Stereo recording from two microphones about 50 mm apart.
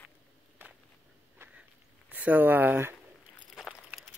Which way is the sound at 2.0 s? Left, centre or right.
Right.